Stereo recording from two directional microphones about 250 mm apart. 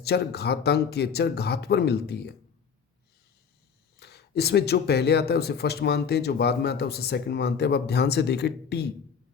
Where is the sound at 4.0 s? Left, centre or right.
Left.